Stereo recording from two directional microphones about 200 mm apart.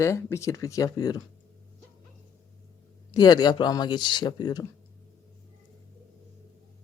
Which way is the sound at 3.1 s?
20° left (ahead or behind).